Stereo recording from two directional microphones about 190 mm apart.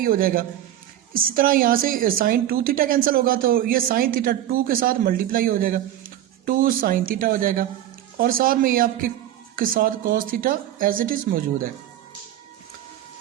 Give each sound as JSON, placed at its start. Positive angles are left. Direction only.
{"t": 0.0, "sound": "a woman's voice", "side_deg": -50}